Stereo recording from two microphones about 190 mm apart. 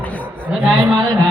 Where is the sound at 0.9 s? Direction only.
15° right (ahead or behind).